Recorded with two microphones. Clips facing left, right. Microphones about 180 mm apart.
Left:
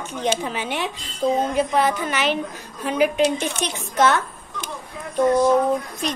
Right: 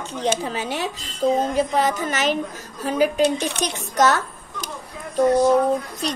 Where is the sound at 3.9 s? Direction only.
40° right (ahead or behind).